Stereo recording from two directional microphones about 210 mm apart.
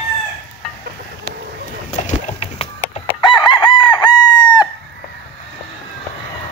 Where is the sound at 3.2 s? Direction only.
20° left (ahead or behind).